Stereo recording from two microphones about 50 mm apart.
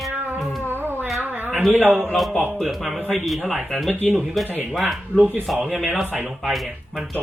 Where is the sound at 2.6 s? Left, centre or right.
Centre.